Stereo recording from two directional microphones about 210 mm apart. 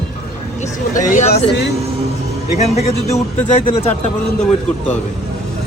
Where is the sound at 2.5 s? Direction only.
30° left (ahead or behind).